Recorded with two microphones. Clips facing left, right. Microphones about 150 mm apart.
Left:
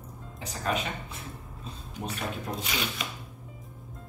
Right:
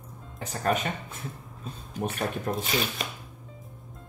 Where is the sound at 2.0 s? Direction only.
45° right (ahead or behind).